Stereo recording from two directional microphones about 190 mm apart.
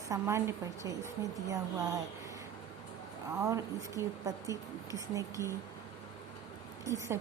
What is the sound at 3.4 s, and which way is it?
A woman's voice, 15° right (ahead or behind).